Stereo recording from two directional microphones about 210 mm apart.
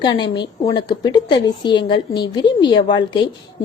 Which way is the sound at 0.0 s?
20° left (ahead or behind).